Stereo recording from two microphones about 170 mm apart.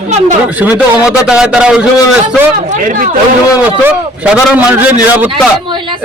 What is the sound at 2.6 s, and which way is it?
Speech, 50° right (ahead or behind).